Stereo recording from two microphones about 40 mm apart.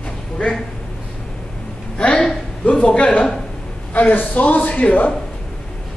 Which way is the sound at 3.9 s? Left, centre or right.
Left.